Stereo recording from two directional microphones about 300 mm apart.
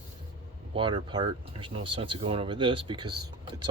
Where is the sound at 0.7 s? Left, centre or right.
Centre.